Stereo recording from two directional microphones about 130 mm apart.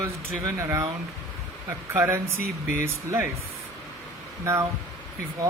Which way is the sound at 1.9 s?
20° right (ahead or behind).